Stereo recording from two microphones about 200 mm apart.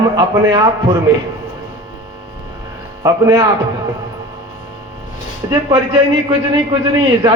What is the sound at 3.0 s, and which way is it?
Speech, 15° right (ahead or behind).